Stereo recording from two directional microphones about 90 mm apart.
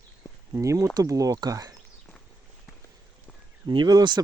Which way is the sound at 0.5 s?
35° right (ahead or behind).